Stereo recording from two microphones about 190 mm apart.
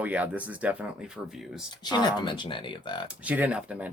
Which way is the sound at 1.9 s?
25° left (ahead or behind).